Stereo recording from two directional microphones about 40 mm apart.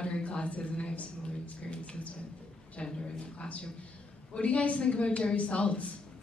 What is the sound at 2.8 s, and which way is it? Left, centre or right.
A man's voice, left.